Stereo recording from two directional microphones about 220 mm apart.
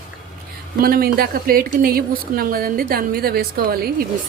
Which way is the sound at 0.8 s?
45° right (ahead or behind).